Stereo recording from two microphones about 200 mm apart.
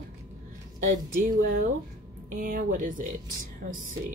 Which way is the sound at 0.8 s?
40° right (ahead or behind).